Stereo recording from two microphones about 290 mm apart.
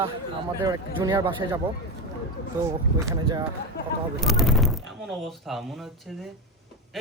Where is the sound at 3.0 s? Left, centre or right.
Centre.